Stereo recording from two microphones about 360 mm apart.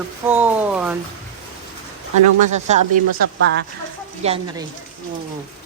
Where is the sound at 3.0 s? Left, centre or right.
Right.